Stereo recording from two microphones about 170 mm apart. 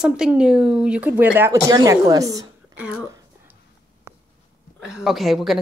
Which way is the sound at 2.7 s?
5° right (ahead or behind).